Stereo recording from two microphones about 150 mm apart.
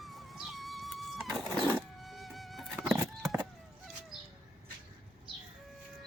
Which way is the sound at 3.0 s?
20° right (ahead or behind).